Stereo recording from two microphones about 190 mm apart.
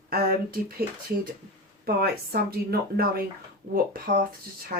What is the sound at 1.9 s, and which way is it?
Speech, 55° right (ahead or behind).